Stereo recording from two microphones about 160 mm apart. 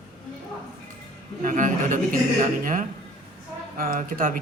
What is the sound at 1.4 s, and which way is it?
Speech, 55° right (ahead or behind).